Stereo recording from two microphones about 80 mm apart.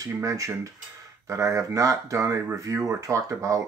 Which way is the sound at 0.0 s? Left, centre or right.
Right.